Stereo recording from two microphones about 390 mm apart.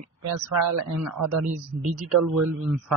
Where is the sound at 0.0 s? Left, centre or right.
Right.